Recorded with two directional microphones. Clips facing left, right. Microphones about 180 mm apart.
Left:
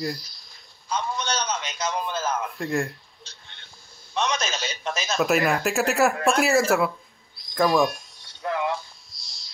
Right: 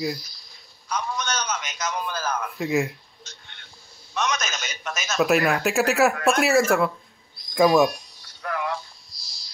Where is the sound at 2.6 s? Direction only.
5° right (ahead or behind).